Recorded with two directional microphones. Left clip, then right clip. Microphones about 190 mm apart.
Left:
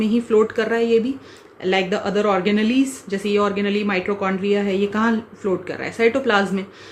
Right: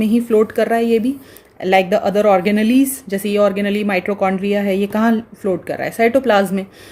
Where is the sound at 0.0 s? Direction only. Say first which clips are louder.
Right 3 dB; 40° right (ahead or behind).